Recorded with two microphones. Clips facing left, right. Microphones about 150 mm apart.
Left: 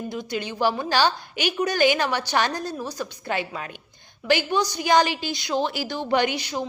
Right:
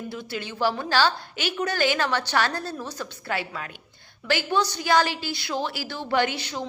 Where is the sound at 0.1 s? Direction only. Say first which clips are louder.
Left 4 dB; 15° left (ahead or behind).